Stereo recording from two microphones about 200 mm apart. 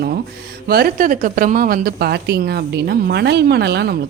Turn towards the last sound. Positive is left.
turn(degrees=-55)  # may be behind; listen again after turning